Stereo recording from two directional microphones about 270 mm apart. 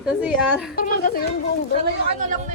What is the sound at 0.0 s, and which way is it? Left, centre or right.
Speech, centre.